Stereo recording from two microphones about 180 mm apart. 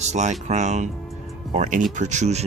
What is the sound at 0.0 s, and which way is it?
Speech, 40° right (ahead or behind).